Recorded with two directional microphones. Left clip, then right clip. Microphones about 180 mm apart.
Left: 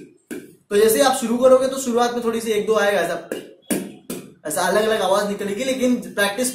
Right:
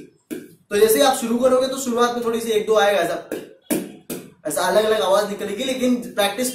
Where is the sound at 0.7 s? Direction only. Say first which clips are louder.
Even; 20° left (ahead or behind).